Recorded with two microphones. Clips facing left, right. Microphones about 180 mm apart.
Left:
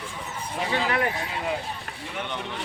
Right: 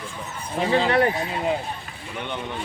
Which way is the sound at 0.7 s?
35° right (ahead or behind).